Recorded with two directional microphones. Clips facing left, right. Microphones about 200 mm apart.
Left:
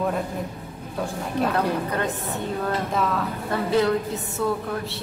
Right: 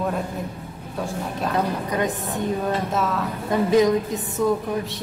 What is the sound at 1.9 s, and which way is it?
Speech, 15° right (ahead or behind).